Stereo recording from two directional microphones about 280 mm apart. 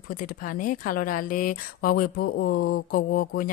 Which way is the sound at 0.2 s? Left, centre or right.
Left.